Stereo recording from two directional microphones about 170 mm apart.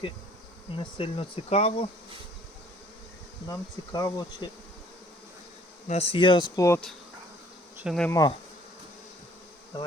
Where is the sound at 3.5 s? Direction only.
25° left (ahead or behind).